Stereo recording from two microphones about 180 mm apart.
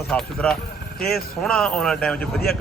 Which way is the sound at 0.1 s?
5° left (ahead or behind).